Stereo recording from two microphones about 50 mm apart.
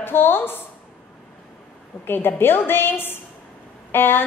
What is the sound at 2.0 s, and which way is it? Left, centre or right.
A woman's voice, left.